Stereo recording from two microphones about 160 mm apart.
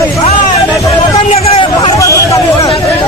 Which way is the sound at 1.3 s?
40° left (ahead or behind).